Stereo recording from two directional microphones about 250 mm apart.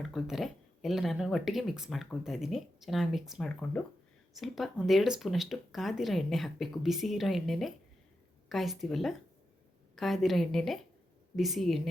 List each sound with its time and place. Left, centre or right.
0.0 s speech: centre